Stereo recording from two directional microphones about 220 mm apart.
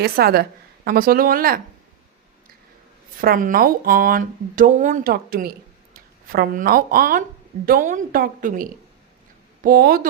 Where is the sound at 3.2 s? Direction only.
40° right (ahead or behind).